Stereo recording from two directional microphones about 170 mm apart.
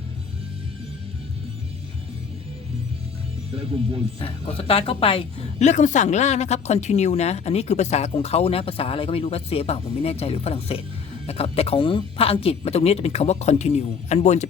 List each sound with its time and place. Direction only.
3.5 s speech: 35° right (ahead or behind)
4.2 s speech: 35° left (ahead or behind)